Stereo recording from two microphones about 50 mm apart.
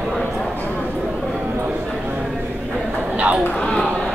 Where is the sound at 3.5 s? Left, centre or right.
Centre.